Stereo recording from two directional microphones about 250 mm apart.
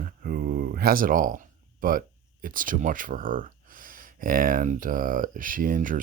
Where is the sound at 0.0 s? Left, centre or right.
Right.